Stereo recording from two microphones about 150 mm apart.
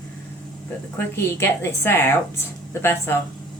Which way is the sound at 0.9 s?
15° left (ahead or behind).